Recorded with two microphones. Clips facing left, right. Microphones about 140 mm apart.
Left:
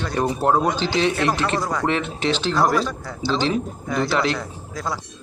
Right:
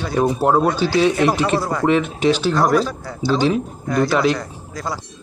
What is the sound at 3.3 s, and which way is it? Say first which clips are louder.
Speech: right 4 dB; 10° right (ahead or behind).